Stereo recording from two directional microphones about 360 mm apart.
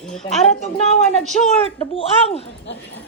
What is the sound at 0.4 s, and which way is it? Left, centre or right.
A woman's voice, centre.